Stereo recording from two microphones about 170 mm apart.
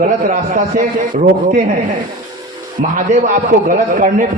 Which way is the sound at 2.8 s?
50° right (ahead or behind).